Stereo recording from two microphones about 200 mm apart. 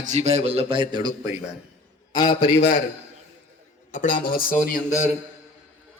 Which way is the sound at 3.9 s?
40° left (ahead or behind).